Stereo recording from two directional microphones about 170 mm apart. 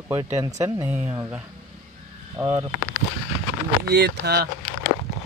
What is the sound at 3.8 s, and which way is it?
Speech, 75° right (ahead or behind).